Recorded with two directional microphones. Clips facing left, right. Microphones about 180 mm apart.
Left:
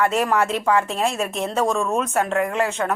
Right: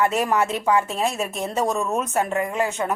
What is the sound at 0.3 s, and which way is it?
A woman's voice, centre (ahead or behind).